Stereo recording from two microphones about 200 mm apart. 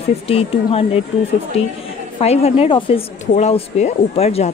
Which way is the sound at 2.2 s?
30° left (ahead or behind).